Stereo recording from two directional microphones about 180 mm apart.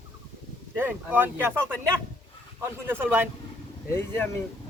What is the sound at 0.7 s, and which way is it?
Speech, 10° right (ahead or behind).